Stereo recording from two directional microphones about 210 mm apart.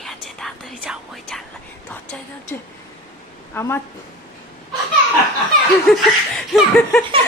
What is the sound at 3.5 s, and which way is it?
Speech, 10° left (ahead or behind).